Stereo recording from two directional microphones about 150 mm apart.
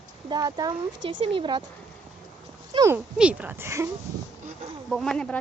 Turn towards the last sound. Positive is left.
turn(degrees=5)  # may be behind; listen again after turning